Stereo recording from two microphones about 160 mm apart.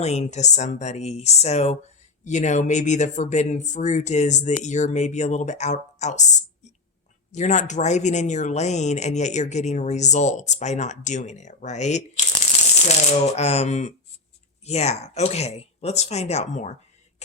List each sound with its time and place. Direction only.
0.0 s speech: 45° left (ahead or behind)